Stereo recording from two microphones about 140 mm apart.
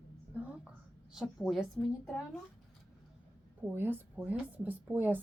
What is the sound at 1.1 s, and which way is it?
A woman's voice, 5° right (ahead or behind).